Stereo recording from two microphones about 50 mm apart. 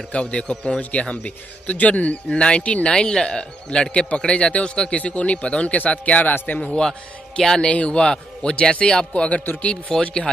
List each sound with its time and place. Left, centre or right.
0.1 s a man's voice: left